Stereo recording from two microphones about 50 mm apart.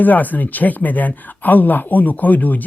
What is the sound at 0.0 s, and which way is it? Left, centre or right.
Speech, left.